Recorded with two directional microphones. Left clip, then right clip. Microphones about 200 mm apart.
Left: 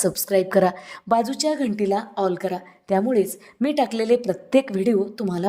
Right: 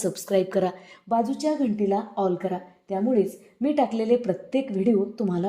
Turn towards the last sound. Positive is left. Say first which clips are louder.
# left 2 dB
turn(degrees=30)  # may be behind; listen again after turning